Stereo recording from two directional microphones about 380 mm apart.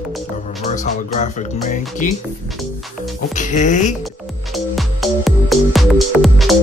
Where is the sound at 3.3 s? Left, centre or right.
Centre.